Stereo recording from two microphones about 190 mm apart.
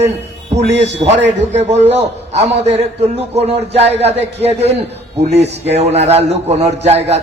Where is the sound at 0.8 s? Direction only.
35° right (ahead or behind).